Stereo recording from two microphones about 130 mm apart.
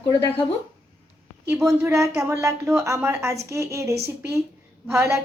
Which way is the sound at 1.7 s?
20° right (ahead or behind).